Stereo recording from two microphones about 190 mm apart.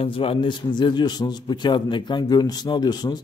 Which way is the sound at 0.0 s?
30° left (ahead or behind).